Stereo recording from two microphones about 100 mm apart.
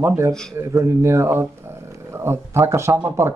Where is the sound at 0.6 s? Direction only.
30° right (ahead or behind).